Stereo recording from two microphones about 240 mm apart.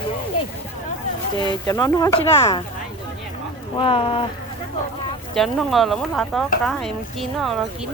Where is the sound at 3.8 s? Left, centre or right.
Left.